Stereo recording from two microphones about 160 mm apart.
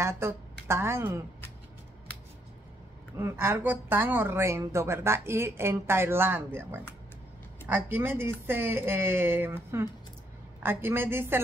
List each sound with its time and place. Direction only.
0.0 s speech: 15° right (ahead or behind)
3.2 s speech: 15° right (ahead or behind)